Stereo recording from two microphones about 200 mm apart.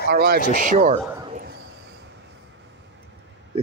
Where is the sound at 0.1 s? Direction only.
50° right (ahead or behind).